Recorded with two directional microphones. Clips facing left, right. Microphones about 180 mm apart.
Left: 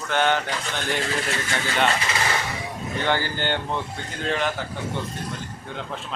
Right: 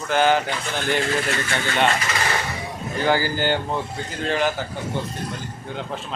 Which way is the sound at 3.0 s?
5° right (ahead or behind).